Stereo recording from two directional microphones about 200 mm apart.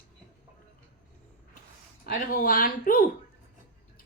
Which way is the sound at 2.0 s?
45° left (ahead or behind).